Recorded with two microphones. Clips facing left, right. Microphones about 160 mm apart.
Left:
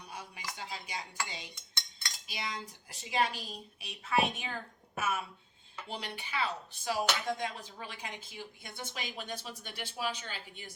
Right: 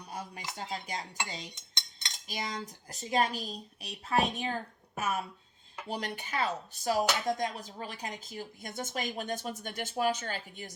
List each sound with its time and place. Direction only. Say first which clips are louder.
0.1 s music: right 6 dB; 45° right (ahead or behind)
0.5 s speech: right 5 dB; 45° right (ahead or behind)
1.5 s cutlery: even; 20° right (ahead or behind)
2.2 s speech: right 4 dB; 45° right (ahead or behind)